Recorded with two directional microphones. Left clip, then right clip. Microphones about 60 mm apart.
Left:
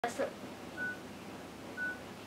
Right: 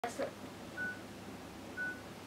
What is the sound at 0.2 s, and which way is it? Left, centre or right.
Speech, centre.